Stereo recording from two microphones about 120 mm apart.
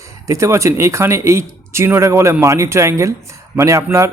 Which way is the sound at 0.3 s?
25° right (ahead or behind).